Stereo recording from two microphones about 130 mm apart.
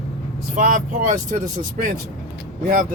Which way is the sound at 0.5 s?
90° right.